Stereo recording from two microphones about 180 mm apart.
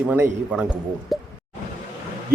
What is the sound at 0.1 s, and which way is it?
Speech, 10° right (ahead or behind).